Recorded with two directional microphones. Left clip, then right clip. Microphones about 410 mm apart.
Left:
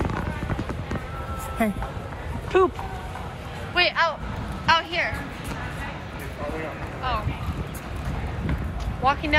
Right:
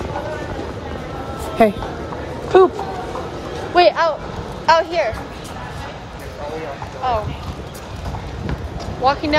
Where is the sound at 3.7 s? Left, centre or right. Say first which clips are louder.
Right 8 dB; centre.